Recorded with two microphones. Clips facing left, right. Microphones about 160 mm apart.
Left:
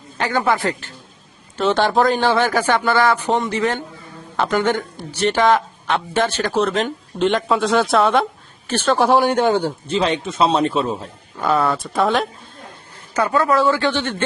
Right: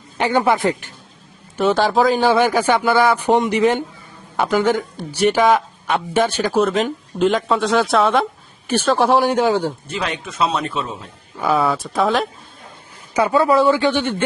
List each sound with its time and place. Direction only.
0.2 s speech: 20° right (ahead or behind); by 2.3 s centre (ahead or behind)
2.3 s speech: 10° right (ahead or behind)
4.4 s speech: 5° right (ahead or behind)
8.6 s speech: 10° right (ahead or behind)
8.9 s speech: centre (ahead or behind)
9.8 s a man's voice: 25° left (ahead or behind)
11.3 s speech: centre (ahead or behind)
13.1 s speech: 15° right (ahead or behind)